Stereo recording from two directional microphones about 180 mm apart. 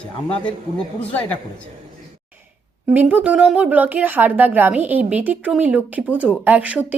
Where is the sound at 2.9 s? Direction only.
10° right (ahead or behind).